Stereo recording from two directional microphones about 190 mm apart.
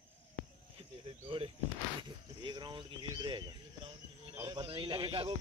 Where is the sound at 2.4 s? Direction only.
25° right (ahead or behind).